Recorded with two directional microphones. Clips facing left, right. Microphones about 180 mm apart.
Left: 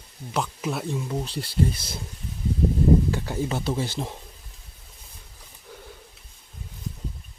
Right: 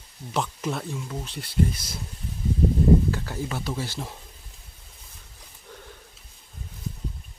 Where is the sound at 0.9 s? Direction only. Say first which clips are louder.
Left 5 dB; 30° left (ahead or behind).